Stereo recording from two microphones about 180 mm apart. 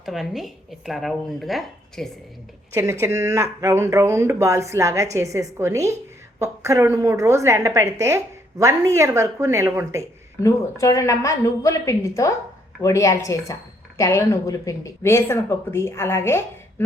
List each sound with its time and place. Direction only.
0.0 s speech: centre (ahead or behind)
2.7 s a woman's voice: 15° right (ahead or behind)
10.4 s speech: 15° left (ahead or behind)